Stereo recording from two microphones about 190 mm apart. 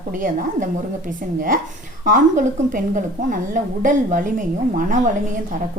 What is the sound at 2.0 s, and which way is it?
A woman's voice, 45° right (ahead or behind).